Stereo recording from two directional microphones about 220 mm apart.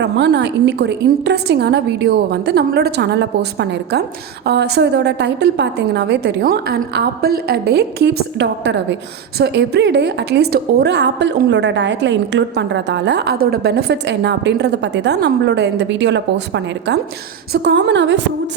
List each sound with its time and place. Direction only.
0.0 s a woman's voice: 50° right (ahead or behind)